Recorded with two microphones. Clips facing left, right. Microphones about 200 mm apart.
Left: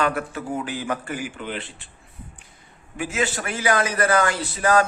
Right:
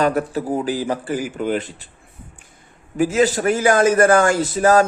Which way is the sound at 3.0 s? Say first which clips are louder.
Right 9 dB; 40° right (ahead or behind).